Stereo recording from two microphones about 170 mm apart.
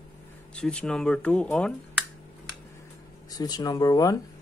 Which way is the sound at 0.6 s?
5° left (ahead or behind).